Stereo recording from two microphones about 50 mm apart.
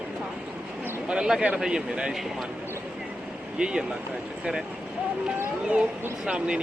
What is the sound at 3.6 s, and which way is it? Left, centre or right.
Speech, centre.